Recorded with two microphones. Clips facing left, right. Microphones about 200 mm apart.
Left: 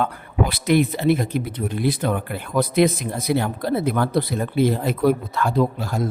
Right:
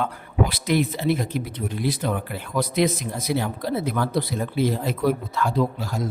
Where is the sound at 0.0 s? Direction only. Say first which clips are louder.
Left 2 dB; 55° left (ahead or behind).